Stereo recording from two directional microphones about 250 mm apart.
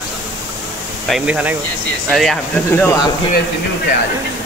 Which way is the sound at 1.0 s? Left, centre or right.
Centre.